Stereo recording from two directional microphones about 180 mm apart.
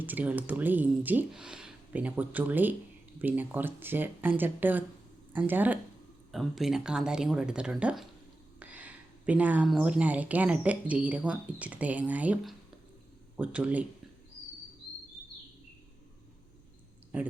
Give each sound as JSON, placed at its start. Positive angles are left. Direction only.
{"t": 0.0, "sound": "speech", "side_deg": -10}
{"t": 8.5, "sound": "a sound", "side_deg": -10}
{"t": 9.7, "sound": "speech", "side_deg": -5}
{"t": 17.1, "sound": "speech", "side_deg": -10}